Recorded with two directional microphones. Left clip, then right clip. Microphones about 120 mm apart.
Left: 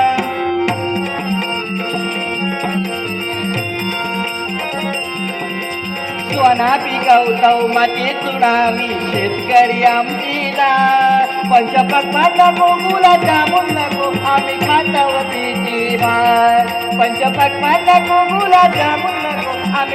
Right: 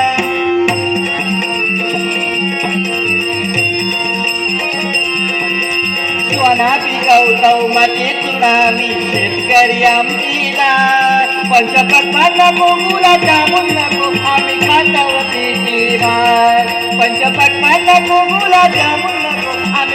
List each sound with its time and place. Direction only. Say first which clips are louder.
6.4 s jingle bell: even; 25° right (ahead or behind)
8.4 s music: right 3 dB; 20° right (ahead or behind)
12.1 s music: right 2 dB; 15° right (ahead or behind)
16.0 s music: even; 5° right (ahead or behind)
17.6 s music: right 1 dB; 25° right (ahead or behind)